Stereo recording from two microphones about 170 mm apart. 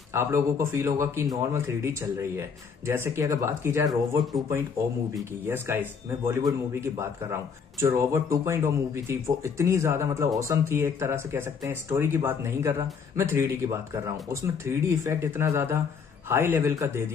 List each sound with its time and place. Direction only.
0.1 s speech: 15° right (ahead or behind)